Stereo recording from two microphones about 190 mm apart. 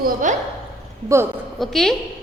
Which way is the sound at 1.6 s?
Centre (ahead or behind).